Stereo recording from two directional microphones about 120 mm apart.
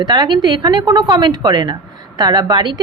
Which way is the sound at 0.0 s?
35° right (ahead or behind).